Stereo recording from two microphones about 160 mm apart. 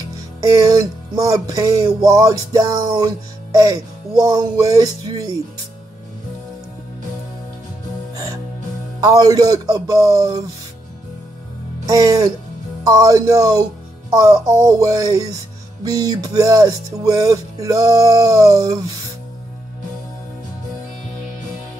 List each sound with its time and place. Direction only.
0.0 s speech: 20° right (ahead or behind)
8.1 s music: 20° right (ahead or behind)
9.0 s speech: 20° right (ahead or behind)
11.8 s speech: 20° right (ahead or behind)